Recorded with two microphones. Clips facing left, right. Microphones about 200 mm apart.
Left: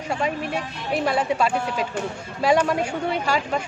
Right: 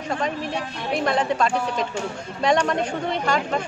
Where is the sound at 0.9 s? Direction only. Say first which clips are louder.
Even; 5° left (ahead or behind).